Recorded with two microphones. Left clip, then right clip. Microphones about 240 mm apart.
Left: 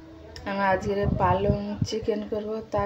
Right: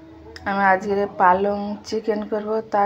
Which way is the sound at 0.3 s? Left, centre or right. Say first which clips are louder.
Right 7 dB; centre.